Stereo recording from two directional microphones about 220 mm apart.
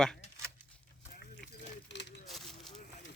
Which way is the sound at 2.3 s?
Centre (ahead or behind).